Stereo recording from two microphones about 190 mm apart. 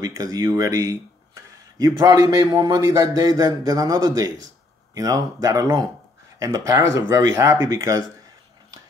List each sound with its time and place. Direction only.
0.0 s speech: 20° right (ahead or behind)